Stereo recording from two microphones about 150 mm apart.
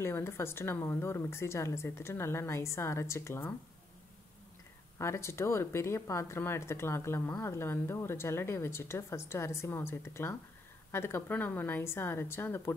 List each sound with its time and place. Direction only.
0.0 s speech: 15° left (ahead or behind)
4.9 s speech: 20° left (ahead or behind)